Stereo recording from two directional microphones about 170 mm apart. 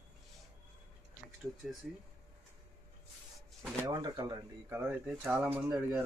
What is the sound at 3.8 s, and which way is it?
Speech, 25° right (ahead or behind).